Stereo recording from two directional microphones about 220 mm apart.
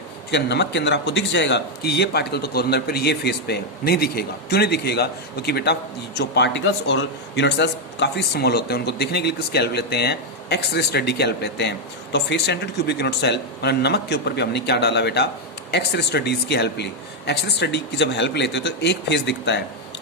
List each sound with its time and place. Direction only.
0.3 s speech: 50° left (ahead or behind)